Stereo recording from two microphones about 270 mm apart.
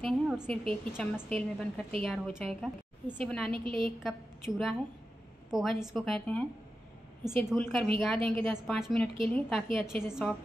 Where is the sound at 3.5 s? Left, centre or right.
Centre.